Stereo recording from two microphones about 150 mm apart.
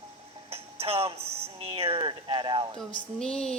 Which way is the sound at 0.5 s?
40° right (ahead or behind).